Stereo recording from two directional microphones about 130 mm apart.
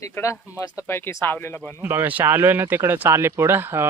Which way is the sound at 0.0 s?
20° left (ahead or behind).